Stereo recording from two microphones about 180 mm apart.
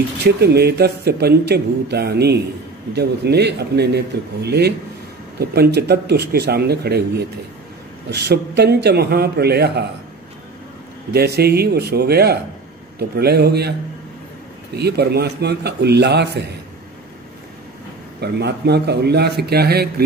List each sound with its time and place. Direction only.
0.2 s speech: 65° right (ahead or behind)
11.1 s speech: 60° right (ahead or behind)
18.2 s speech: 65° right (ahead or behind)